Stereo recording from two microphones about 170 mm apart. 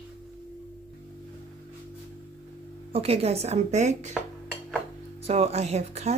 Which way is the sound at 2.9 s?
35° right (ahead or behind).